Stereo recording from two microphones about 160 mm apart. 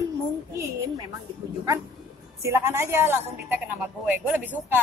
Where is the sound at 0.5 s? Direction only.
20° right (ahead or behind).